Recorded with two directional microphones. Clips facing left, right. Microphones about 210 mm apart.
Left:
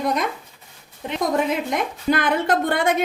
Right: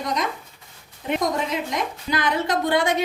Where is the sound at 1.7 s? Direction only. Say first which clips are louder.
Left 4 dB; 55° left (ahead or behind).